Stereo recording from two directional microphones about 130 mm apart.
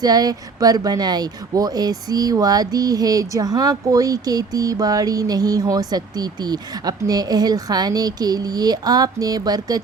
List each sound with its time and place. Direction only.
0.0 s speech: 30° right (ahead or behind)